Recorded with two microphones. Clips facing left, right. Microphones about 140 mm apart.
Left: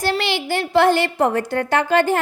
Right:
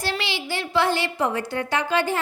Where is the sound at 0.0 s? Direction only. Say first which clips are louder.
Left 7 dB; 50° left (ahead or behind).